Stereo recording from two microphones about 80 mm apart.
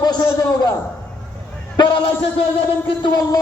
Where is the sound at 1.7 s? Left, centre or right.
Left.